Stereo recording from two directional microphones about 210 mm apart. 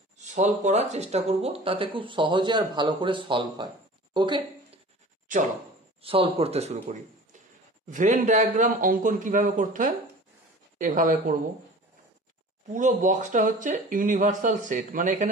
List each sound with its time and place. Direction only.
0.2 s a woman's voice: 35° right (ahead or behind)
6.0 s speech: 25° right (ahead or behind)
12.7 s speech: 35° right (ahead or behind)